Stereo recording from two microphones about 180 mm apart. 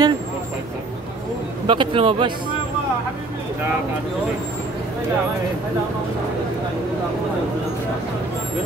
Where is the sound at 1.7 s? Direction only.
30° right (ahead or behind).